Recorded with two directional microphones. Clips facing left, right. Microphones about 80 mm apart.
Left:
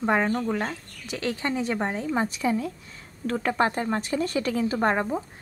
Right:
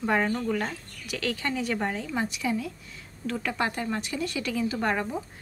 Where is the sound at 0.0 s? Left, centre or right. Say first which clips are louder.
Left 2 dB; left.